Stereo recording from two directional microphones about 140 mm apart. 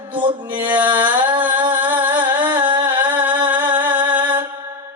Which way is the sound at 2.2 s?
35° right (ahead or behind).